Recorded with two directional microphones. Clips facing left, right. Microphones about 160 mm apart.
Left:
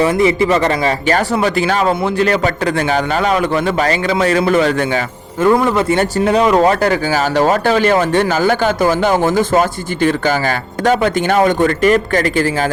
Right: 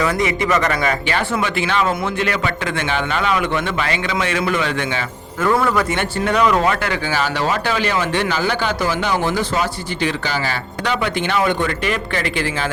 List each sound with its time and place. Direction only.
0.0 s speech: 30° left (ahead or behind)
5.4 s speech: 20° left (ahead or behind)
5.9 s speech: 35° left (ahead or behind)